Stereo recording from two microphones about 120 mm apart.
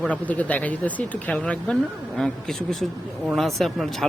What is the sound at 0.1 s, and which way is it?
A man's voice, 10° left (ahead or behind).